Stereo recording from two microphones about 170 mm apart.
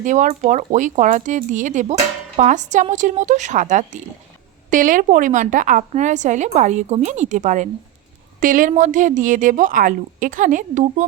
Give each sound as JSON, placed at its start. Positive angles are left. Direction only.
{"t": 0.0, "sound": "a woman's voice", "side_deg": -50}